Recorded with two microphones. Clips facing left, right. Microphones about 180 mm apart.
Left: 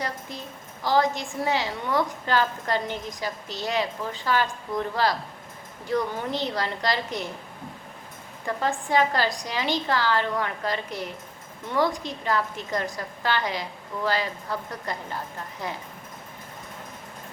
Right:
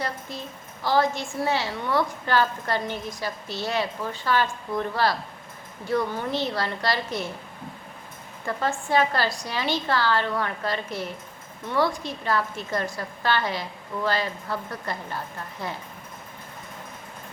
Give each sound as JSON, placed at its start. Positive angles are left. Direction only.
{"t": 0.9, "sound": "a woman's voice", "side_deg": 15}
{"t": 5.9, "sound": "a woman's voice", "side_deg": 15}
{"t": 8.4, "sound": "a woman's voice", "side_deg": 15}